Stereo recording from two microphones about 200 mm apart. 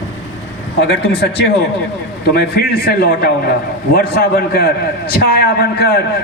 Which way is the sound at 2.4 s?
50° left (ahead or behind).